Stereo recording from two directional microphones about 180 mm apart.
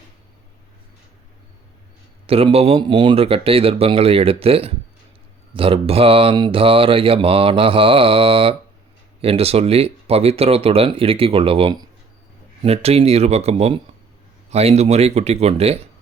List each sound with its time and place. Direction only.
2.2 s mantra: 30° right (ahead or behind)